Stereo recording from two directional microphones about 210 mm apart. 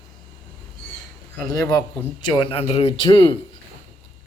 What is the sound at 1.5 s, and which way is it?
A man's voice, 15° left (ahead or behind).